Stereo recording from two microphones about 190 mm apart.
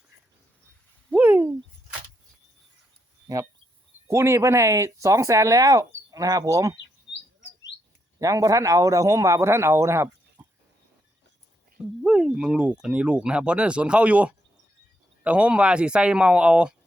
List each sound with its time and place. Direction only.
1.1 s a sound: 10° right (ahead or behind)
4.1 s a man's voice: 15° right (ahead or behind)
8.2 s a man's voice: 20° right (ahead or behind)
12.0 s speech: 5° right (ahead or behind)